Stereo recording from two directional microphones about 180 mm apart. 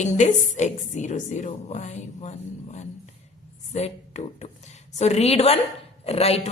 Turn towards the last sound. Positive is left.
turn(degrees=35)  # may be behind; listen again after turning